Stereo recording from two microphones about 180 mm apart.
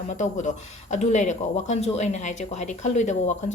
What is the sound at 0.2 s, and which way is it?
Speech, 40° left (ahead or behind).